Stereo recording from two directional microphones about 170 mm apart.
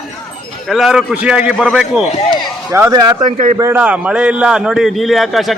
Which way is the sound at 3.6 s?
10° right (ahead or behind).